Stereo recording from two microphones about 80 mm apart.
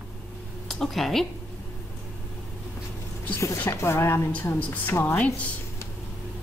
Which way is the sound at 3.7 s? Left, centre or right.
Left.